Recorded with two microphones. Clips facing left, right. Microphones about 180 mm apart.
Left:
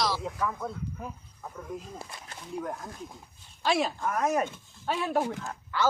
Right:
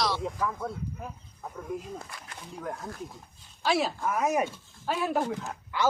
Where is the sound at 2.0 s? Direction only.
30° left (ahead or behind).